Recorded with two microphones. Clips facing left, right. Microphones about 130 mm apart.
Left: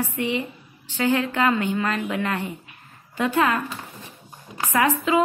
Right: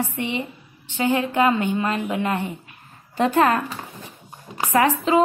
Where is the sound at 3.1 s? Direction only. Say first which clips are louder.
Right 3 dB; 35° right (ahead or behind).